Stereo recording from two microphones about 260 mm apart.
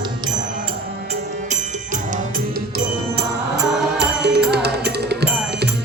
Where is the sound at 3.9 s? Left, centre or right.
Right.